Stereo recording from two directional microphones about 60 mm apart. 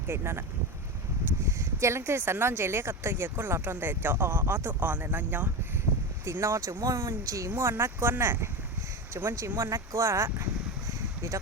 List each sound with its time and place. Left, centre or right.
0.1 s speech: right
1.5 s speech: right
6.4 s speech: right
7.5 s speech: right
9.1 s speech: right